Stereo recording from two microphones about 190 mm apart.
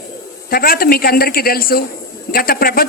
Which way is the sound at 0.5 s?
50° left (ahead or behind).